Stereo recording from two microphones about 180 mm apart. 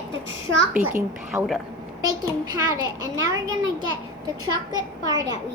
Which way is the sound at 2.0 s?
20° right (ahead or behind).